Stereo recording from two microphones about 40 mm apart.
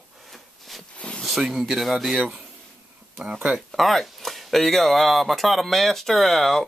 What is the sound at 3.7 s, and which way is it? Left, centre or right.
Speech, centre.